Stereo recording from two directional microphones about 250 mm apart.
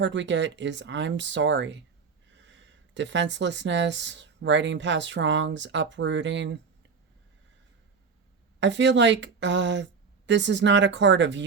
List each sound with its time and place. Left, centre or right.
0.0 s speech: right
8.6 s speech: right